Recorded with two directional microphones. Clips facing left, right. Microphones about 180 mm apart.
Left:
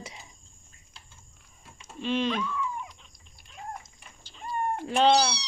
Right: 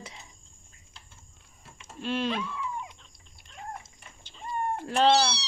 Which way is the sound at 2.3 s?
25° right (ahead or behind).